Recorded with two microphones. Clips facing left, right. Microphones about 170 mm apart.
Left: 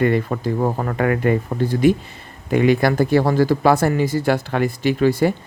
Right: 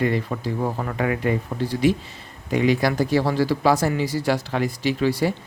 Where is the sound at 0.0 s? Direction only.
55° left (ahead or behind).